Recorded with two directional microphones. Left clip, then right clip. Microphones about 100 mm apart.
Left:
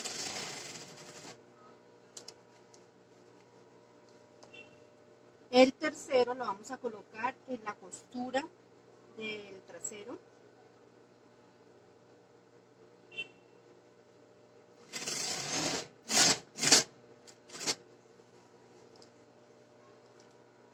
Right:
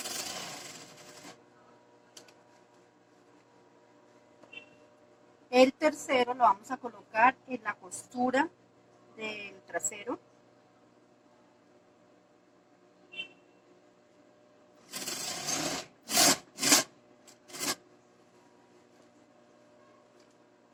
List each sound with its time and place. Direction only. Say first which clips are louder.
0.0 s a sound: right 1 dB; 30° right (ahead or behind)
5.5 s a woman's voice: right 2 dB; 35° right (ahead or behind)
14.8 s sewing machine: even; 30° right (ahead or behind)
16.4 s filing: even; 30° right (ahead or behind)